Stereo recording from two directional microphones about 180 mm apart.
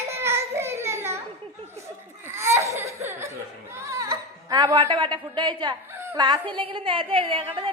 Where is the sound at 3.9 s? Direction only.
15° right (ahead or behind).